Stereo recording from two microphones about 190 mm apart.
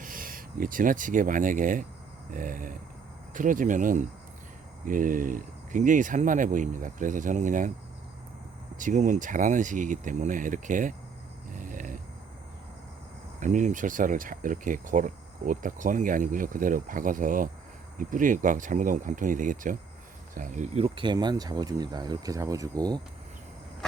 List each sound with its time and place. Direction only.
0.0 s speech: 45° right (ahead or behind)
8.8 s speech: 40° right (ahead or behind)
11.5 s a sound: 45° right (ahead or behind)
13.4 s speech: 40° right (ahead or behind); by 23.0 s 20° right (ahead or behind)